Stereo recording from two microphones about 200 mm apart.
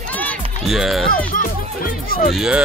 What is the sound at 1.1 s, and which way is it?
Music, 45° left (ahead or behind).